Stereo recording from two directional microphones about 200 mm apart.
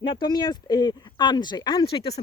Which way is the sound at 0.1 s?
20° left (ahead or behind).